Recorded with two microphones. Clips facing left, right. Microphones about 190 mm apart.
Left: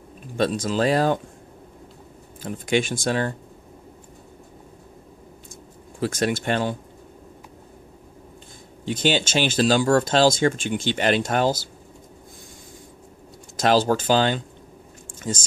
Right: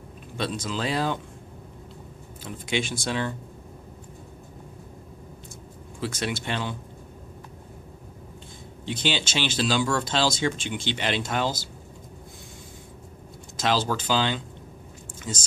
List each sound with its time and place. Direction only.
0.4 s speech: 45° left (ahead or behind)
2.4 s speech: 50° left (ahead or behind)
5.9 s speech: 45° left (ahead or behind)
8.8 s speech: 45° left (ahead or behind)
13.6 s speech: 50° left (ahead or behind)